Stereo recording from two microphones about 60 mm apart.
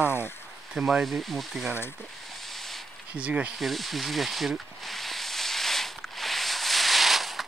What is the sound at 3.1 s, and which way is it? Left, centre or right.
Speech, right.